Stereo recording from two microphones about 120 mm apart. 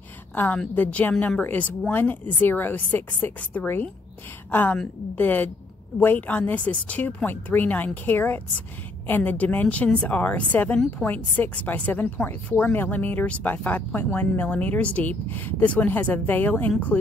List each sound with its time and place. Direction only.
0.3 s a woman's voice: 15° left (ahead or behind)